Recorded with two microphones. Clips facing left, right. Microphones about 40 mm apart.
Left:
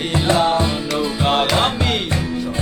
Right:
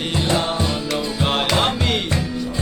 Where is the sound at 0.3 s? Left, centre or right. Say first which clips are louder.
Left 6 dB; centre.